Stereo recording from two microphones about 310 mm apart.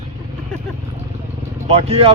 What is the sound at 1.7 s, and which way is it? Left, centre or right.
Speech, centre.